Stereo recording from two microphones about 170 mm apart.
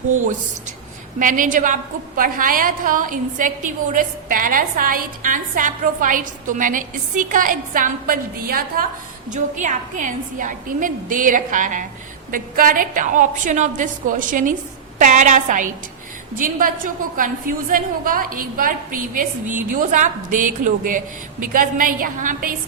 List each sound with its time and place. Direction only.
1.2 s a woman's voice: 50° right (ahead or behind)
9.3 s a woman's voice: 45° right (ahead or behind)